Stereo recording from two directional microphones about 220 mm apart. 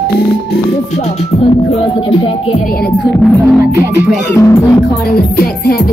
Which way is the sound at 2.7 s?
45° left (ahead or behind).